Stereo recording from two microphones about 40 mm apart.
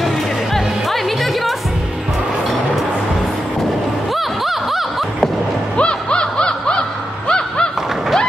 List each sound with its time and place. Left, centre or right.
0.0 s music: centre
4.1 s music: centre
5.8 s snicker: left
7.2 s a sound: left